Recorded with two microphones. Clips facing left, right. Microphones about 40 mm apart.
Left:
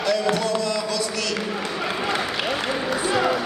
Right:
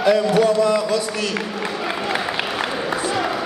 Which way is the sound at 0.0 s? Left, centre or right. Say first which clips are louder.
Right 6 dB; right.